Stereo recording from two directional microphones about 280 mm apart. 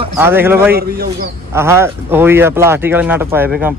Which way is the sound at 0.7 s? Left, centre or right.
Right.